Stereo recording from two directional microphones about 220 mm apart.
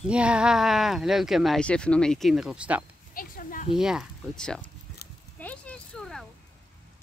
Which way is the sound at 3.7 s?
Centre (ahead or behind).